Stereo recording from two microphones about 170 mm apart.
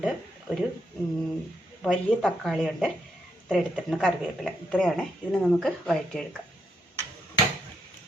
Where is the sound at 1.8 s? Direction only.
Centre (ahead or behind).